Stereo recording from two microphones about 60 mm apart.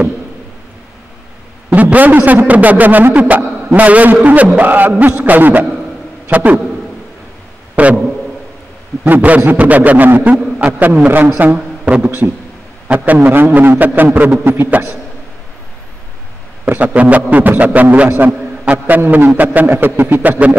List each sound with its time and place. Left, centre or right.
1.7 s a man's voice: right
7.7 s a sound: right
9.0 s a man's voice: right
11.8 s a man's voice: right
16.6 s a man's voice: right
18.4 s a sound: right
18.9 s a man's voice: right